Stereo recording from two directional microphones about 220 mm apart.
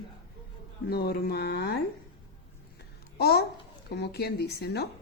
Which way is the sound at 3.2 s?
45° left (ahead or behind).